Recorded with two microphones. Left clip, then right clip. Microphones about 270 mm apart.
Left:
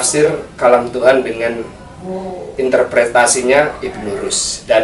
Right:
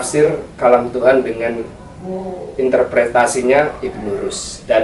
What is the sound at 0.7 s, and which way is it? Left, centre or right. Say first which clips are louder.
Speech: even; right.